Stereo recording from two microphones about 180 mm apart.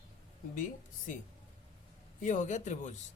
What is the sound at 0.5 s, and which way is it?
Speech, 45° left (ahead or behind).